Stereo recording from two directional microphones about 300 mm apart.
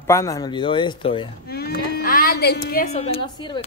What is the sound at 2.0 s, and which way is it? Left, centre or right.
Music, left.